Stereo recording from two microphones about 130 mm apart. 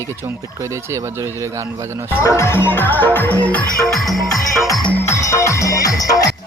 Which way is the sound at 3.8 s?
Centre (ahead or behind).